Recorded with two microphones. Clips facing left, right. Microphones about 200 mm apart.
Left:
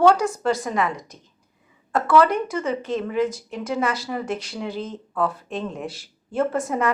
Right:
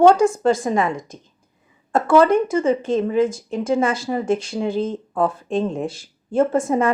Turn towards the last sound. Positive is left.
turn(degrees=-25)  # may be behind; listen again after turning